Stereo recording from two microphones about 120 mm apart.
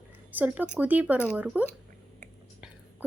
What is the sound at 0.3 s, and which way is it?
A woman's voice, 10° right (ahead or behind).